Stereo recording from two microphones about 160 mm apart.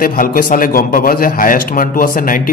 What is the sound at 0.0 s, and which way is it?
A man's voice, 60° left (ahead or behind).